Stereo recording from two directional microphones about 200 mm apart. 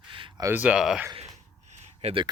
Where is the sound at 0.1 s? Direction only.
20° right (ahead or behind); by 1.0 s 5° right (ahead or behind).